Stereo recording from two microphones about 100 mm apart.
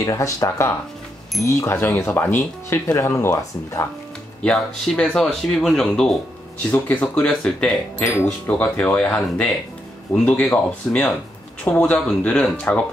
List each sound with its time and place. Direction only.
0.0 s speech: 35° left (ahead or behind)
4.4 s speech: 5° left (ahead or behind)
6.7 s speech: 15° left (ahead or behind)
8.0 s speech: 25° left (ahead or behind); by 12.8 s 10° left (ahead or behind)